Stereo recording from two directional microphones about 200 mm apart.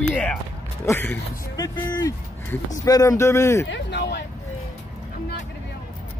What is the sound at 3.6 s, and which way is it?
Speech, 65° left (ahead or behind).